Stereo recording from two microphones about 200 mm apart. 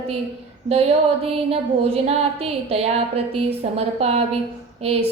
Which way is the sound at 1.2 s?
30° right (ahead or behind).